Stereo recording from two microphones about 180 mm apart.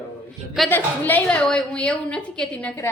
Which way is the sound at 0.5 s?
5° left (ahead or behind).